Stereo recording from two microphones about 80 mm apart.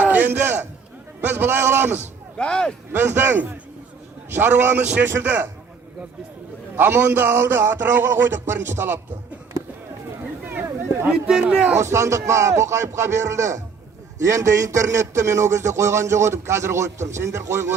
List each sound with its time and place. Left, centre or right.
0.0 s a sound: right
1.2 s a man's voice: right
2.4 s speech: centre
2.9 s a man's voice: right
6.7 s a man's voice: right
10.4 s a sound: right
11.1 s speech: centre
11.8 s a man's voice: right